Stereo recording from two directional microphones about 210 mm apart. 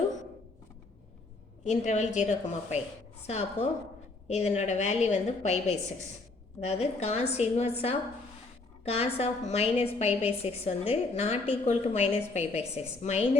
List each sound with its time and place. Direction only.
1.6 s a woman's voice: 35° left (ahead or behind)
8.8 s a woman's voice: 30° left (ahead or behind)